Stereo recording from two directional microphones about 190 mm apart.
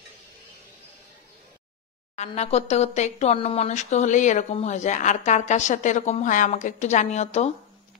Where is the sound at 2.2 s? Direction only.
35° left (ahead or behind).